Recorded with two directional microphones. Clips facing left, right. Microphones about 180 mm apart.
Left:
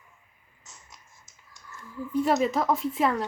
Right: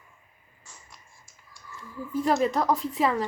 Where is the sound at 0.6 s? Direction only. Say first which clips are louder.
Right 1 dB; 20° left (ahead or behind).